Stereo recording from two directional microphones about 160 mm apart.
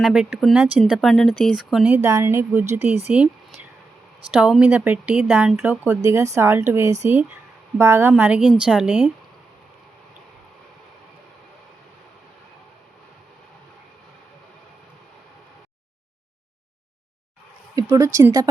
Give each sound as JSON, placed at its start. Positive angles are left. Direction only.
{"t": 0.0, "sound": "a woman's voice", "side_deg": -5}
{"t": 2.0, "sound": "speech", "side_deg": -20}
{"t": 4.3, "sound": "a woman's voice", "side_deg": -5}
{"t": 6.0, "sound": "speech", "side_deg": -20}
{"t": 17.7, "sound": "speech", "side_deg": -20}